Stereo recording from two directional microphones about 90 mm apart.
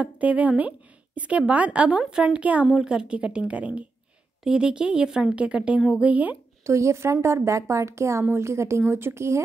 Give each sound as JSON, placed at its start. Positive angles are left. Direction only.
{"t": 0.0, "sound": "a woman's voice", "side_deg": -15}
{"t": 6.6, "sound": "a woman's voice", "side_deg": -35}